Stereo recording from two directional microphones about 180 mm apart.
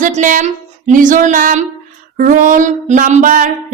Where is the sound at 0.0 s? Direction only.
45° right (ahead or behind).